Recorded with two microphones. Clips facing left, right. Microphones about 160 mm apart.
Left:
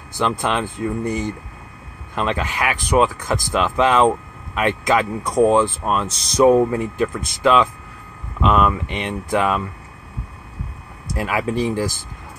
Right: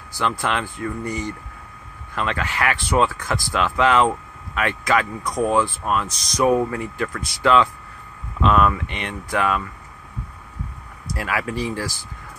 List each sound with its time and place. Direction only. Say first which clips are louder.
0.1 s speech: left 3 dB; 20° left (ahead or behind)
11.1 s speech: left 4 dB; 20° left (ahead or behind)